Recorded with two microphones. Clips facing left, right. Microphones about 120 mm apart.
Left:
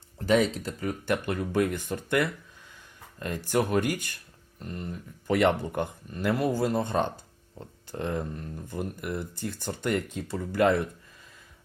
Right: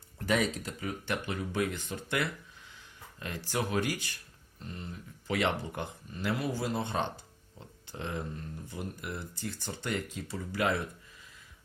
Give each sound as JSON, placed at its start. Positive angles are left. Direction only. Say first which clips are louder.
{"t": 0.2, "sound": "speech", "louder": "left 6 dB", "side_deg": 30}